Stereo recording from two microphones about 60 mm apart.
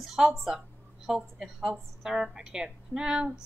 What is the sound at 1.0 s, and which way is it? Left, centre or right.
Speech, centre.